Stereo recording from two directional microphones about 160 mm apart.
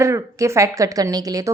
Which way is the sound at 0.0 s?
20° right (ahead or behind).